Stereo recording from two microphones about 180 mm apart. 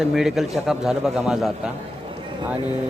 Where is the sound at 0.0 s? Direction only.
Centre (ahead or behind).